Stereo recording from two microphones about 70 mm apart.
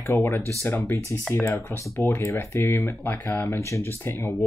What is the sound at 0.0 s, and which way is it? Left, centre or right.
Speech, left.